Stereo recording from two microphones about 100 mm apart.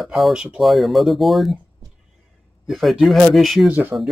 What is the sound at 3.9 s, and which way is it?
Speech, 20° right (ahead or behind).